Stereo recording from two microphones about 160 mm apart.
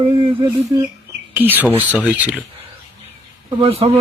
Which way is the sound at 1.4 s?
10° right (ahead or behind).